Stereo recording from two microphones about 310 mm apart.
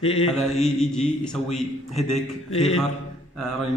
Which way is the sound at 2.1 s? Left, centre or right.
Left.